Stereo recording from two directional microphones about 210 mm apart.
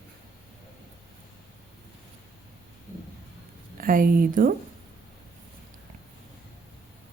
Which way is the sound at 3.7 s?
40° right (ahead or behind).